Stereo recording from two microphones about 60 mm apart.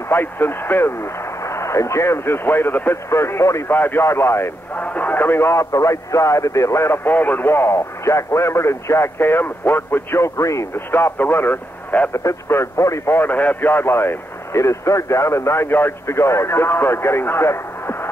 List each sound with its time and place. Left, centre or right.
0.1 s speech: left
1.5 s a man's voice: left
3.1 s a man's voice: left
3.6 s a man's voice: left
4.7 s speech: left
5.5 s speech: left
7.1 s speech: left
7.4 s a man's voice: left
10.2 s speech: left
10.9 s a man's voice: left
12.1 s a man's voice: left
13.1 s a man's voice: left